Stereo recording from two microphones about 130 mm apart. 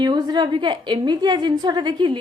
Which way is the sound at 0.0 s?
35° right (ahead or behind).